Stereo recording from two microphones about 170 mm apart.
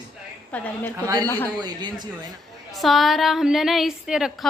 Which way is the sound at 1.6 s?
25° right (ahead or behind).